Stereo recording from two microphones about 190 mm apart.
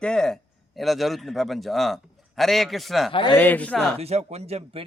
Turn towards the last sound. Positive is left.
turn(degrees=-35)  # may be behind; listen again after turning